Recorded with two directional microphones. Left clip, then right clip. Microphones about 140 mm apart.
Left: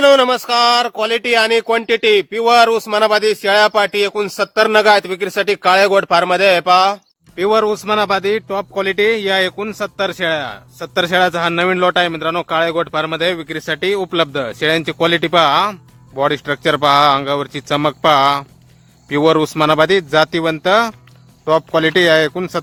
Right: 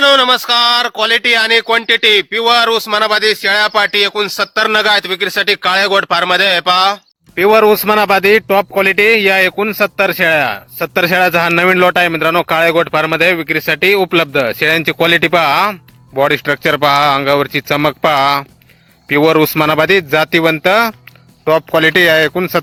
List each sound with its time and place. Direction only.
0.0 s speech: centre (ahead or behind)
7.3 s speech: 40° right (ahead or behind); by 22.6 s 15° right (ahead or behind)